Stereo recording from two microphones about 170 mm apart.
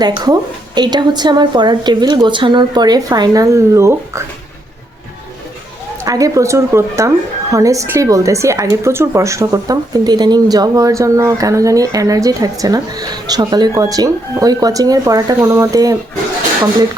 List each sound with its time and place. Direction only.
0.0 s speech: 25° right (ahead or behind)
6.0 s speech: 20° right (ahead or behind)